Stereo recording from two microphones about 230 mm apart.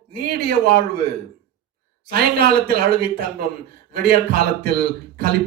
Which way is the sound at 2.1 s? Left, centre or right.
Right.